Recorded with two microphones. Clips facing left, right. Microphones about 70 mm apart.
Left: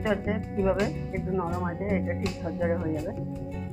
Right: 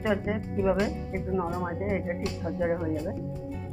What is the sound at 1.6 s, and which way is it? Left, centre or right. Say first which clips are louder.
Speech: left 1 dB; centre.